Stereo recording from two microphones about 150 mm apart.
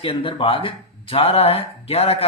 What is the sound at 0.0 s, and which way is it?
Speech, 35° left (ahead or behind).